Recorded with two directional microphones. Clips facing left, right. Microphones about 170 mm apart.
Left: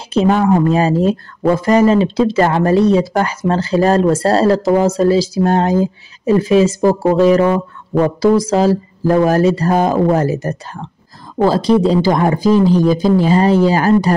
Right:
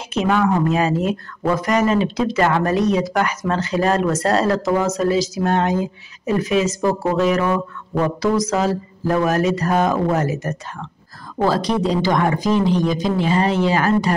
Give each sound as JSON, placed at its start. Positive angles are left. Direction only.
{"t": 0.1, "sound": "speech", "side_deg": 35}